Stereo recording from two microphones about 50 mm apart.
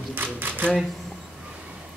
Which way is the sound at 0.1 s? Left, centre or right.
Right.